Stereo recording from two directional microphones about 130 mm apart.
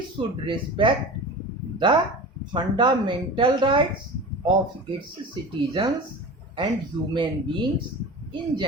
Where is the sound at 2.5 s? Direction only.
40° right (ahead or behind).